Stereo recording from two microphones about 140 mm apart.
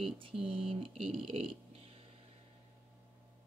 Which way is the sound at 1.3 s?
45° right (ahead or behind).